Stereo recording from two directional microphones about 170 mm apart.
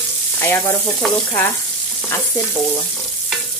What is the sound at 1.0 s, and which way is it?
Frying, 5° left (ahead or behind).